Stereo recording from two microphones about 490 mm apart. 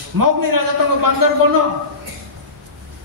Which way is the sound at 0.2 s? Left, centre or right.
Right.